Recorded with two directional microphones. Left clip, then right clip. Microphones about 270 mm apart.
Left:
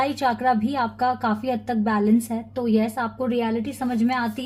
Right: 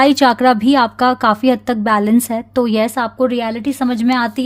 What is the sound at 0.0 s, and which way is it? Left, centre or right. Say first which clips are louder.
Speech: right 11 dB; right.